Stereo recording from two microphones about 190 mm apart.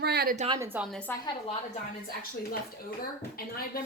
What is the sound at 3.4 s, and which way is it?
Speech, 50° left (ahead or behind).